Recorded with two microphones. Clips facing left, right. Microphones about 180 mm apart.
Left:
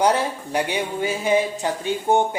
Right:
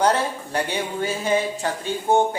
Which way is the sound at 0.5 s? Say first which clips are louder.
Left 2 dB; 15° left (ahead or behind).